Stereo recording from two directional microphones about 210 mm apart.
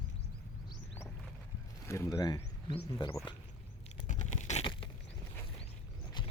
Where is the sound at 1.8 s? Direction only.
15° left (ahead or behind).